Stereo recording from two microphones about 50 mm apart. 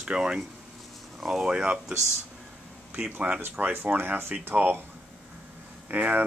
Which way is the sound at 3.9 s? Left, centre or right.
Right.